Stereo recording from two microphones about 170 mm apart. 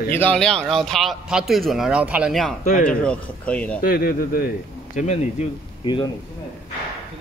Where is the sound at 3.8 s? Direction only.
60° left (ahead or behind).